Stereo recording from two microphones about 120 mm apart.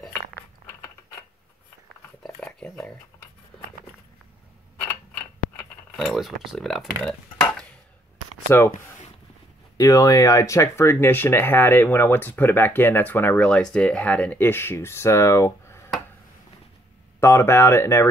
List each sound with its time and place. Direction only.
2.6 s a sound: 15° left (ahead or behind)
5.9 s speech: centre (ahead or behind)
7.0 s stir: 5° left (ahead or behind)
8.5 s speech: 20° left (ahead or behind)
9.8 s speech: 30° left (ahead or behind)
17.2 s speech: 20° left (ahead or behind)